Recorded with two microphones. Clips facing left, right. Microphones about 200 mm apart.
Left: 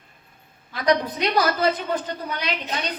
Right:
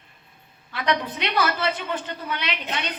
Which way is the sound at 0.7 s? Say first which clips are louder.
Left 4 dB; 40° left (ahead or behind).